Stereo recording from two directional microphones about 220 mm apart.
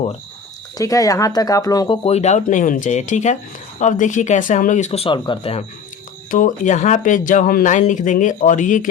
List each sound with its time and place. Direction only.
0.8 s speech: 15° left (ahead or behind)
2.0 s speech: 30° left (ahead or behind)